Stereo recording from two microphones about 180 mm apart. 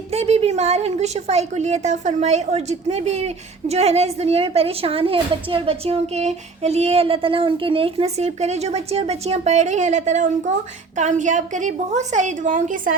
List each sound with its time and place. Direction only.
0.1 s a woman's voice: 35° right (ahead or behind)